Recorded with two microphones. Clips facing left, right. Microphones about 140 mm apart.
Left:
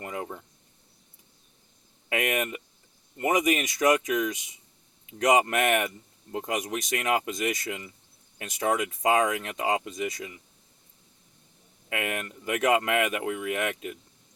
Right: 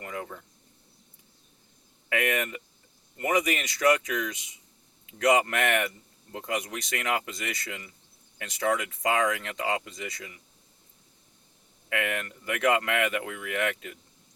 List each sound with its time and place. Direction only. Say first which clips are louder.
0.0 s a sound: left 2 dB; 25° left (ahead or behind)
2.0 s speech: even; 20° left (ahead or behind)
11.9 s speech: right 1 dB; 20° left (ahead or behind)